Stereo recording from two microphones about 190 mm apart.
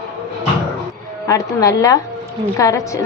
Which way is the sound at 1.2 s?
15° left (ahead or behind).